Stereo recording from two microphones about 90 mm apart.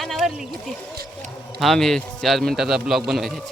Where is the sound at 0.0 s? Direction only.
Centre (ahead or behind).